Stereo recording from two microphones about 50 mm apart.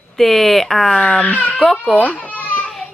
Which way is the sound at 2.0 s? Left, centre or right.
Left.